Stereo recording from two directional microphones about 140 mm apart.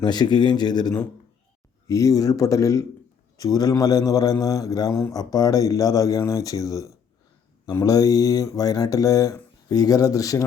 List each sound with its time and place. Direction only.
0.0 s a man's voice: 30° left (ahead or behind)